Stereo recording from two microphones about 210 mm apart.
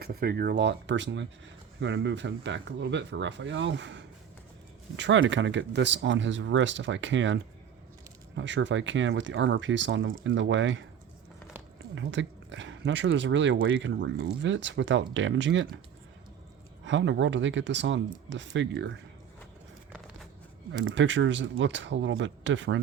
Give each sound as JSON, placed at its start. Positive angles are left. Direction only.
{"t": 0.0, "sound": "speech", "side_deg": -45}
{"t": 8.4, "sound": "speech", "side_deg": -60}
{"t": 11.9, "sound": "speech", "side_deg": -60}
{"t": 16.8, "sound": "speech", "side_deg": -60}
{"t": 20.8, "sound": "speech", "side_deg": -60}